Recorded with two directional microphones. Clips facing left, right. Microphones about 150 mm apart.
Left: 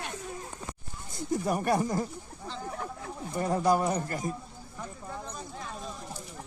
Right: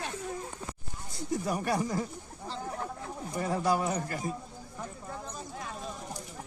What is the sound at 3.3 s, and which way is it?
Speech, 40° left (ahead or behind).